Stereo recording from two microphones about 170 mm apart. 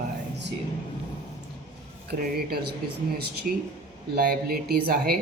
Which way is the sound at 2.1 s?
65° right (ahead or behind).